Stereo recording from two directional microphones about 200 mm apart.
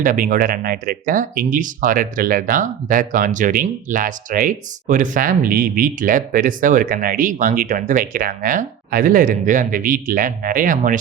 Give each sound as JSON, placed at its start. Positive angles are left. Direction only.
{"t": 0.0, "sound": "speech", "side_deg": -45}